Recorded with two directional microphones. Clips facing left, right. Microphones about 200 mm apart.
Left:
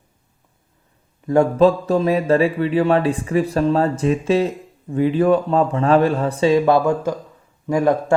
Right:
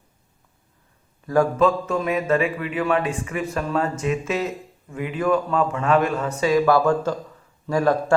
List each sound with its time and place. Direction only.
1.2 s speech: 25° left (ahead or behind)